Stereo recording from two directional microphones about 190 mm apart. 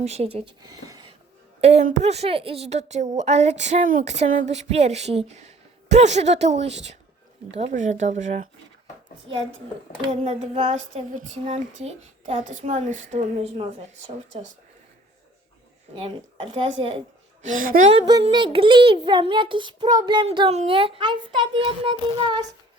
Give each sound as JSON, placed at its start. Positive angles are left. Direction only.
{"t": 0.0, "sound": "speech", "side_deg": -35}
{"t": 1.6, "sound": "speech", "side_deg": -35}
{"t": 10.1, "sound": "speech", "side_deg": -35}
{"t": 16.0, "sound": "a child's voice", "side_deg": -30}
{"t": 17.4, "sound": "speech", "side_deg": -45}
{"t": 18.0, "sound": "a child's voice", "side_deg": -20}